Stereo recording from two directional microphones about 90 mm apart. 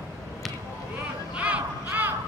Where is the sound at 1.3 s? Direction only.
15° right (ahead or behind).